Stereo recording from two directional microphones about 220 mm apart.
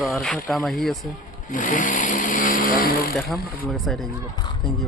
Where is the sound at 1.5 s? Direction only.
35° left (ahead or behind).